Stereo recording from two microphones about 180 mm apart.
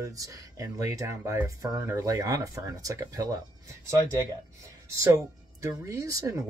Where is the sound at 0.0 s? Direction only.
20° right (ahead or behind).